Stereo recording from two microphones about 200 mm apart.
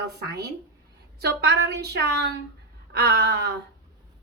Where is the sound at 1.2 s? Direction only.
55° right (ahead or behind).